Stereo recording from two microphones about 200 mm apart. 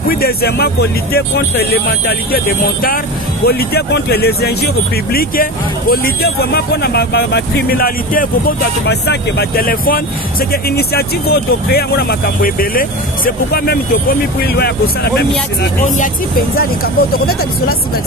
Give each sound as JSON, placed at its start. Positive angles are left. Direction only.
{"t": 0.2, "sound": "speech", "side_deg": 50}
{"t": 15.8, "sound": "speech", "side_deg": 45}